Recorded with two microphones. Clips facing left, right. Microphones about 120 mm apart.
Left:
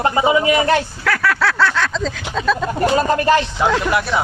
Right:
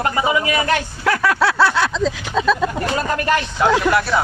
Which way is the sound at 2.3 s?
Centre (ahead or behind).